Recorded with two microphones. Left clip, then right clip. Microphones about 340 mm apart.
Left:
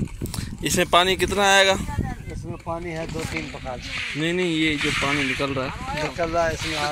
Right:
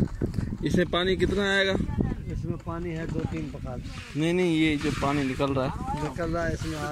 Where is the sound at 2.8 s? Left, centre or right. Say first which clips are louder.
Left 4 dB; left.